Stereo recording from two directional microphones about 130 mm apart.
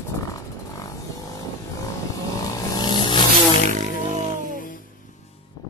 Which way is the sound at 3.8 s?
60° right (ahead or behind).